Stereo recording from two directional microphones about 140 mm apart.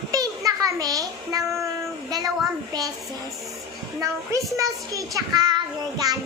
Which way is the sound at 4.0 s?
25° right (ahead or behind).